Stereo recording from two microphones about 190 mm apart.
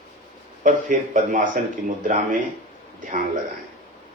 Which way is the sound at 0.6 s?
40° right (ahead or behind).